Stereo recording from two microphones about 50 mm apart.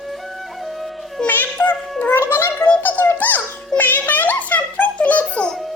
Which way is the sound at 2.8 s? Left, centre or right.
Left.